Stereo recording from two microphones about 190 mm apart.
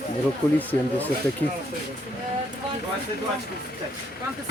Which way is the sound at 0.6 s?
10° left (ahead or behind).